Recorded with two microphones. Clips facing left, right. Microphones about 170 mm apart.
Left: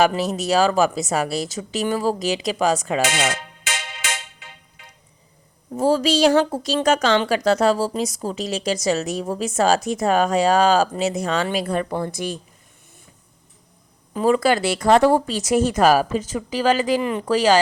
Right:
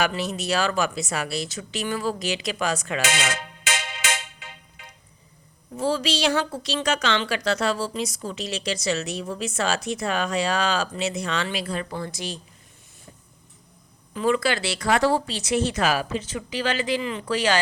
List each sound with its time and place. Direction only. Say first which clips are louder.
0.0 s speech: left 6 dB; 40° left (ahead or behind)
3.1 s music: left 3 dB; 90° right
5.7 s a woman's voice: left 6 dB; 45° left (ahead or behind)
14.1 s a woman's voice: left 5 dB; 40° left (ahead or behind)